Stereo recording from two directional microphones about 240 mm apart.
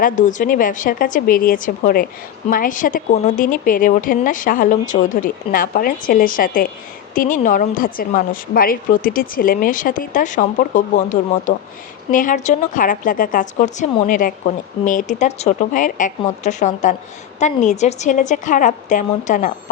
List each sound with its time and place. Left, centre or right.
0.0 s a woman's voice: left